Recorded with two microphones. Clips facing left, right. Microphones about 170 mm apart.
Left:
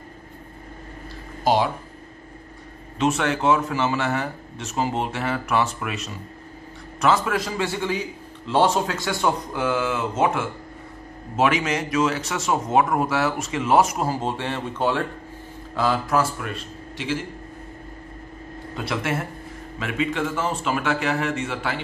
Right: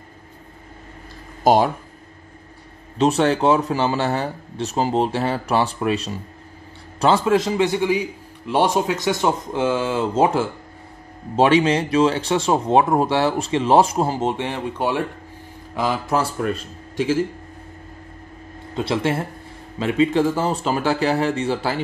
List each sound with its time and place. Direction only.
1.4 s speech: 45° right (ahead or behind)
3.0 s speech: 35° right (ahead or behind); by 16.2 s 15° right (ahead or behind)
16.2 s speech: 40° right (ahead or behind)
18.8 s speech: 30° right (ahead or behind)